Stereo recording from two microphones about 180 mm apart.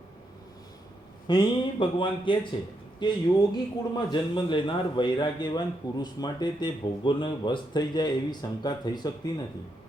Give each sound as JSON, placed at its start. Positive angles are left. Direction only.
{"t": 1.3, "sound": "a man's voice", "side_deg": 25}